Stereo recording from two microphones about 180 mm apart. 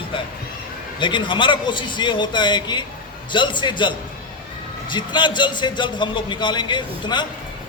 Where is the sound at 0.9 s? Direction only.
25° left (ahead or behind).